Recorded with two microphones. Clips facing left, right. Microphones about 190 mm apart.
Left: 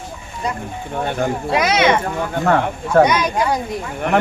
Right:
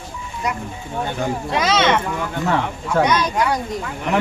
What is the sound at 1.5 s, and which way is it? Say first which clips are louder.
Speech: left 2 dB; 10° left (ahead or behind).